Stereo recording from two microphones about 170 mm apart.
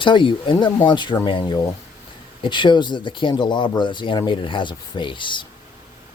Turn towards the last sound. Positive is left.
turn(degrees=30)  # may be behind; listen again after turning